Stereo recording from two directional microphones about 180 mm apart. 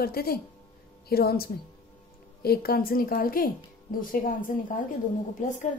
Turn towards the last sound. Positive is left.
turn(degrees=45)  # may be behind; listen again after turning